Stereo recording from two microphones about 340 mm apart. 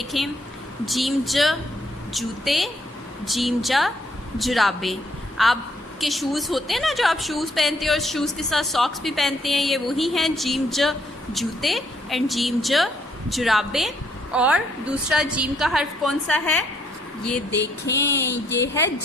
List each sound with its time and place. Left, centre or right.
0.0 s a woman's voice: centre
17.6 s a sound: left
18.6 s a woman's voice: centre